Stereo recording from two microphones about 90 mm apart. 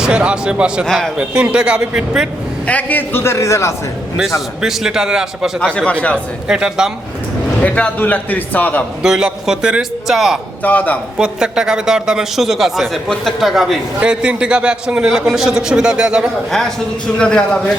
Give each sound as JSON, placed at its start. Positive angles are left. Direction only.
{"t": 0.0, "sound": "a man's voice", "side_deg": -10}
{"t": 0.9, "sound": "a man's voice", "side_deg": 5}
{"t": 1.1, "sound": "a man's voice", "side_deg": -10}
{"t": 2.6, "sound": "a man's voice", "side_deg": 20}
{"t": 4.4, "sound": "a man's voice", "side_deg": -5}
{"t": 5.5, "sound": "speech", "side_deg": 10}
{"t": 6.5, "sound": "a man's voice", "side_deg": -5}
{"t": 7.6, "sound": "a man's voice", "side_deg": 15}
{"t": 9.0, "sound": "a man's voice", "side_deg": -10}
{"t": 10.6, "sound": "speech", "side_deg": 15}
{"t": 11.2, "sound": "a man's voice", "side_deg": -10}
{"t": 14.0, "sound": "a man's voice", "side_deg": -10}
{"t": 16.5, "sound": "a man's voice", "side_deg": 5}